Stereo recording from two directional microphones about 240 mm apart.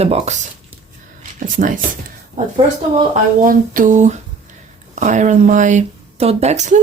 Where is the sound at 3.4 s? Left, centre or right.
Right.